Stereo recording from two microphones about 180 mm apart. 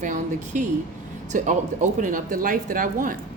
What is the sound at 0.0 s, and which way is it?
A woman's voice, 45° right (ahead or behind).